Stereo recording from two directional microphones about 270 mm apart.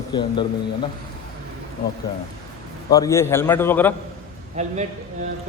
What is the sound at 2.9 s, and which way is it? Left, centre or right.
A man's voice, centre.